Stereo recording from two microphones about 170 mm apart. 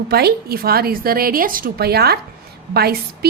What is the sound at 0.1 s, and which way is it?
A woman's voice, 70° right (ahead or behind).